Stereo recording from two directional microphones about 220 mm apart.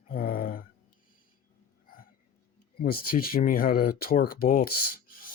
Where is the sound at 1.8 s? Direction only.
40° left (ahead or behind).